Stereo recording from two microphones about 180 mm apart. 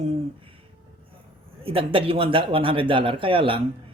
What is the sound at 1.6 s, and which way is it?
A man's voice, 30° right (ahead or behind).